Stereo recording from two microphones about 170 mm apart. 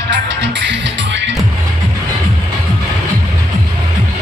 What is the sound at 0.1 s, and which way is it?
Music, 90° right.